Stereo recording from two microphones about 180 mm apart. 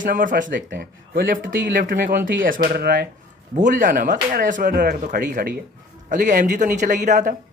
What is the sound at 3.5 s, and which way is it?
Speech, 45° right (ahead or behind).